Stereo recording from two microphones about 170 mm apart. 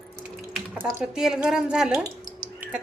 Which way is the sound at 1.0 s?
5° right (ahead or behind).